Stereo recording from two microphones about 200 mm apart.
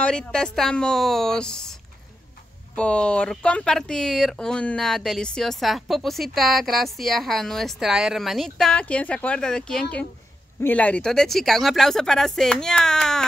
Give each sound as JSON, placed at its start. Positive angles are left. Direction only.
{"t": 0.0, "sound": "speech", "side_deg": 5}